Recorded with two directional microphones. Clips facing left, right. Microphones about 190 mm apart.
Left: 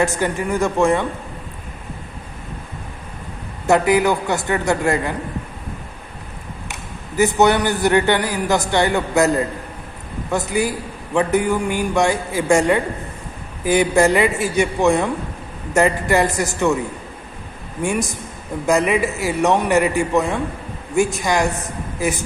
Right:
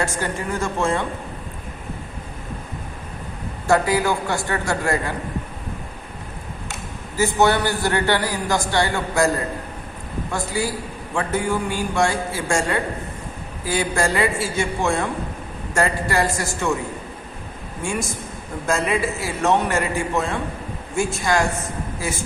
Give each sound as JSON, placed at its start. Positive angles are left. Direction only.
{"t": 0.0, "sound": "a man's voice", "side_deg": 15}
{"t": 3.7, "sound": "a man's voice", "side_deg": 20}
{"t": 7.2, "sound": "a man's voice", "side_deg": 20}
{"t": 10.3, "sound": "a man's voice", "side_deg": 20}
{"t": 17.8, "sound": "a man's voice", "side_deg": 20}